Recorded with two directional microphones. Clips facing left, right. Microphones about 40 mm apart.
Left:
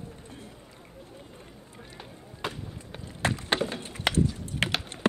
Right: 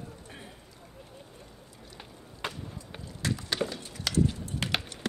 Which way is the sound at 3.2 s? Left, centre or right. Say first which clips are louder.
Left 4 dB; left.